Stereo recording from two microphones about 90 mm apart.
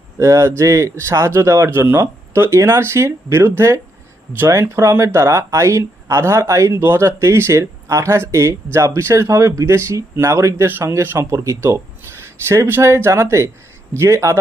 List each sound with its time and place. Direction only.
0.2 s speech: 30° right (ahead or behind)